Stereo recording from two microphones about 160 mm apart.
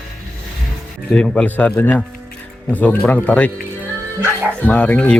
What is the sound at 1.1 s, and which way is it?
Speech, 5° left (ahead or behind).